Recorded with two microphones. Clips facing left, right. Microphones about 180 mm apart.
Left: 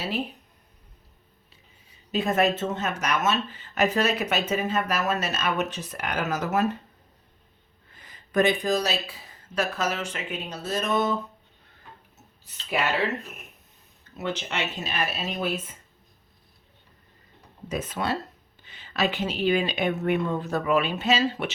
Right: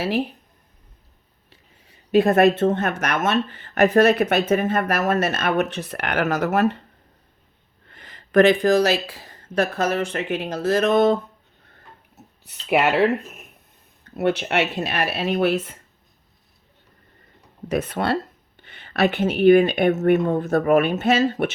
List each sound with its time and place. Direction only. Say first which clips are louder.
2.1 s speech: right 8 dB; 60° right (ahead or behind)
7.9 s speech: right 6 dB; 70° right (ahead or behind)
12.6 s speech: right 8 dB; 65° right (ahead or behind)
14.0 s speech: right 9 dB; 65° right (ahead or behind)
17.7 s speech: right 6 dB; 65° right (ahead or behind)